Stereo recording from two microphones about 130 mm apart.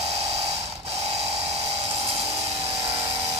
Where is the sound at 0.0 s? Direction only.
55° right (ahead or behind).